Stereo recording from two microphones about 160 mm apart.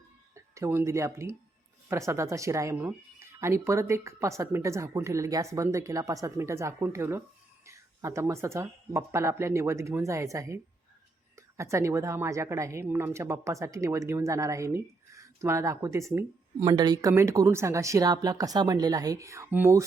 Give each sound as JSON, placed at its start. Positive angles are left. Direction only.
{"t": 0.3, "sound": "a woman's voice", "side_deg": -20}